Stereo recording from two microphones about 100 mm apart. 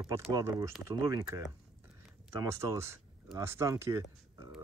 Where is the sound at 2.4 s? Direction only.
35° right (ahead or behind).